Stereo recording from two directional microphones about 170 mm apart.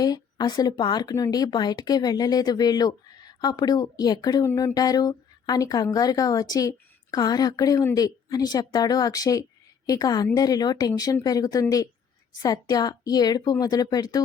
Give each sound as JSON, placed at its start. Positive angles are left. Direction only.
{"t": 0.0, "sound": "speech", "side_deg": 20}